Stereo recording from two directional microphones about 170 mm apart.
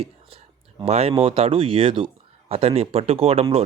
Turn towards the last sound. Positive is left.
turn(degrees=-35)  # may be behind; listen again after turning